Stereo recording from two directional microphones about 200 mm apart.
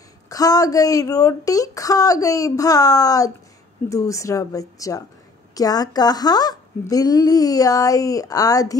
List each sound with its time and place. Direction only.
0.3 s speech: 15° left (ahead or behind)